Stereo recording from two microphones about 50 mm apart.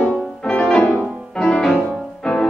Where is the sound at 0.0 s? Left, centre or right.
Centre.